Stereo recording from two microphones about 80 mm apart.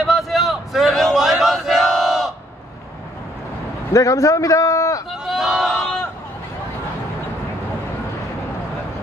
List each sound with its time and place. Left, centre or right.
0.0 s a sound: centre
3.9 s a man's voice: left
5.2 s crowd: centre